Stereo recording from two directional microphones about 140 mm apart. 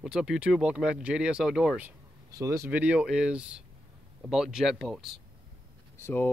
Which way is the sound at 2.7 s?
10° right (ahead or behind).